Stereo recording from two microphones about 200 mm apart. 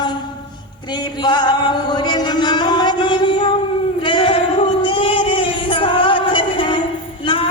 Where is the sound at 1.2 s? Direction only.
20° left (ahead or behind).